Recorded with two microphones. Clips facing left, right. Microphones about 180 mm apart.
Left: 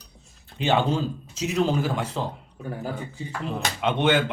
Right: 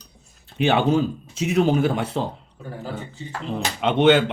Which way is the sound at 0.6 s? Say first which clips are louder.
Right 4 dB; 65° right (ahead or behind).